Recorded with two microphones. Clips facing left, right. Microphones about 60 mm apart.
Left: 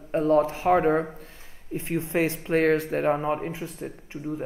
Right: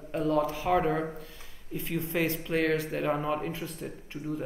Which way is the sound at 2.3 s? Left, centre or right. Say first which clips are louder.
Left 6 dB; left.